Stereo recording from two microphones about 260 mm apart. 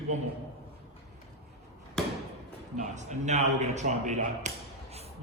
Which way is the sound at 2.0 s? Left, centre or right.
Centre.